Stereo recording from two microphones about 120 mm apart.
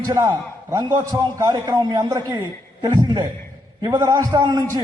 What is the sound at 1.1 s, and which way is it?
A man's voice, 30° right (ahead or behind).